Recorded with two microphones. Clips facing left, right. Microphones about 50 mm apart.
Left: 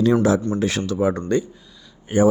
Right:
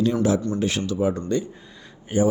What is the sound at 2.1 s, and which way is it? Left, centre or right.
Speech, left.